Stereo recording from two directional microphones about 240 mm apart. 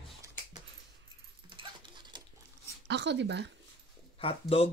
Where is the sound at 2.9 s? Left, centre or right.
Right.